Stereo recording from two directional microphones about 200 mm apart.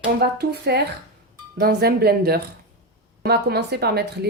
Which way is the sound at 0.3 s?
55° right (ahead or behind).